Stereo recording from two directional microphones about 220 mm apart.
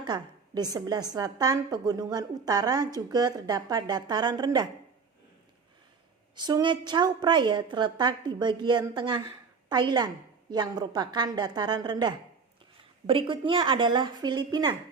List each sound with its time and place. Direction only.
0.0 s a woman's voice: 20° right (ahead or behind)
6.3 s a woman's voice: 20° right (ahead or behind)